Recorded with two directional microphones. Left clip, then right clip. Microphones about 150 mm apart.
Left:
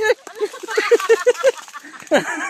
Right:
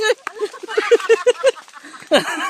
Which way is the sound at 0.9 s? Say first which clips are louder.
Right 1 dB; 15° right (ahead or behind).